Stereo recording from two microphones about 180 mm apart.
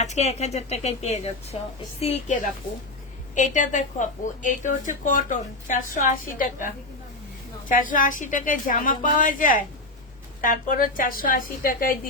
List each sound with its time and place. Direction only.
0.0 s a woman's voice: 40° left (ahead or behind)